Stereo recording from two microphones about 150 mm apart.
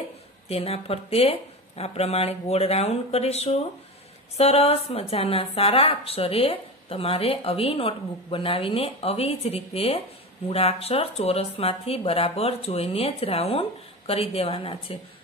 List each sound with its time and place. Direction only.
0.5 s a woman's voice: 40° left (ahead or behind)